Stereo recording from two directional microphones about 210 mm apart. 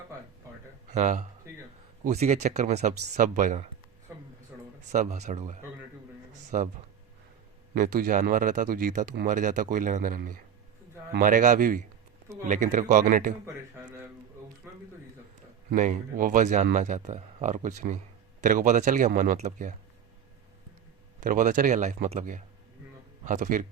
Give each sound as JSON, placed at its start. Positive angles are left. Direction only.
{"t": 0.9, "sound": "speech", "side_deg": -35}
{"t": 4.9, "sound": "speech", "side_deg": -35}
{"t": 7.7, "sound": "speech", "side_deg": -40}
{"t": 13.4, "sound": "a man's voice", "side_deg": -10}
{"t": 14.6, "sound": "a sound", "side_deg": -10}
{"t": 15.7, "sound": "speech", "side_deg": -40}
{"t": 21.2, "sound": "speech", "side_deg": -40}